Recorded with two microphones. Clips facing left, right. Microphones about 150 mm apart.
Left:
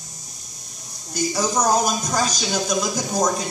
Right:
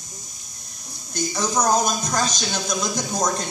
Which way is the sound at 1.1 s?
10° left (ahead or behind).